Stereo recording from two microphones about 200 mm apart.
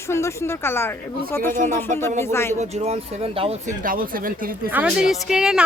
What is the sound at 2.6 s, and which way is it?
Speech, 35° right (ahead or behind).